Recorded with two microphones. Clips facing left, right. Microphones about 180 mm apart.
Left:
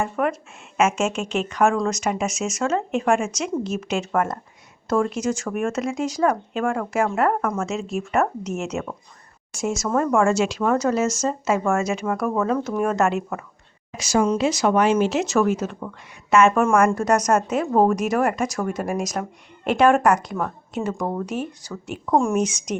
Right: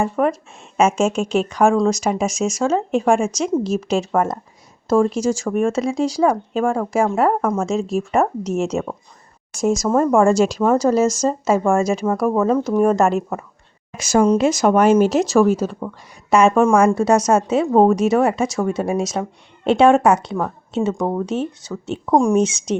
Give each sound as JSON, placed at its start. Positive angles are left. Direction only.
{"t": 0.0, "sound": "speech", "side_deg": -35}
{"t": 13.9, "sound": "a woman's voice", "side_deg": -50}
{"t": 22.1, "sound": "speech", "side_deg": -15}
{"t": 22.4, "sound": "speech", "side_deg": -30}